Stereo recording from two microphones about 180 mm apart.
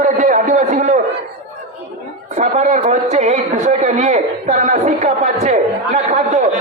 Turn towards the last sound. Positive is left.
turn(degrees=-40)  # may be behind; listen again after turning